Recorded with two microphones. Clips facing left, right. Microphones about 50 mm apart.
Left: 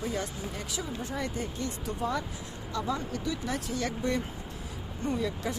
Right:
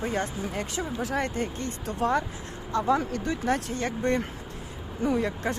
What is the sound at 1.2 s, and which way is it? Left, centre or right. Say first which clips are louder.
Speech: right 3 dB; right.